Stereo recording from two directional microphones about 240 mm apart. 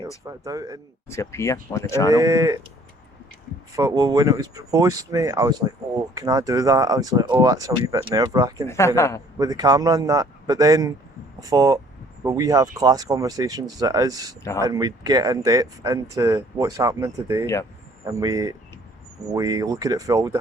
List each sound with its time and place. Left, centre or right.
0.3 s speech: centre
1.0 s speech: centre
2.1 s speech: centre
3.8 s speech: centre
8.6 s speech: centre
9.4 s speech: centre